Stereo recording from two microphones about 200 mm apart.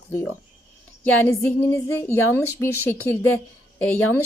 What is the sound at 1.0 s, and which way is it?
Speech, 10° left (ahead or behind).